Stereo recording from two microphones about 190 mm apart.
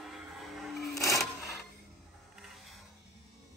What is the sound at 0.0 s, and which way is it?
Music, centre (ahead or behind).